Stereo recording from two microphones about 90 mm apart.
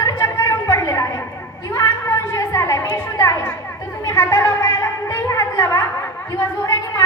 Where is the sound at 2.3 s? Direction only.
35° left (ahead or behind).